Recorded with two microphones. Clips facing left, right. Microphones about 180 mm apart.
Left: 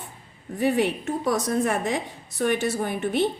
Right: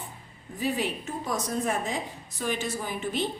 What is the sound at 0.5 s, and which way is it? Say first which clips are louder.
A woman's voice: left 7 dB; 65° left (ahead or behind).